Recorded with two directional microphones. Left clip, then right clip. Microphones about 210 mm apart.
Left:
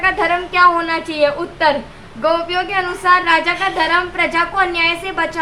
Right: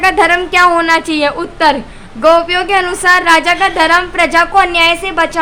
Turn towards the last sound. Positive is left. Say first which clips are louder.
# right 6 dB
turn(degrees=-50)  # may be behind; listen again after turning